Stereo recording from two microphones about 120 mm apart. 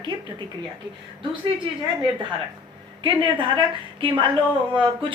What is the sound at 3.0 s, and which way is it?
Speech, 45° right (ahead or behind).